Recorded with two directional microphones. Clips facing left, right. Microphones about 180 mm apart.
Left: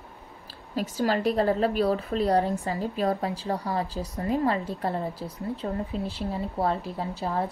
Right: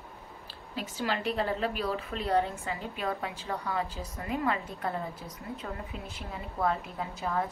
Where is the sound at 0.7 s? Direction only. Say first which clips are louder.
Left 7 dB; 40° left (ahead or behind).